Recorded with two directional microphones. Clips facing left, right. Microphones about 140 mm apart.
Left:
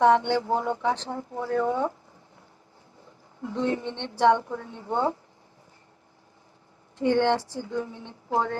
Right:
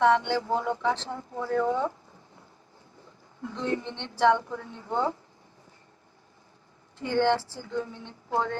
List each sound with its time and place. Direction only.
0.0 s speech: 20° left (ahead or behind)
3.5 s speech: 15° left (ahead or behind)
7.0 s a woman's voice: 15° left (ahead or behind)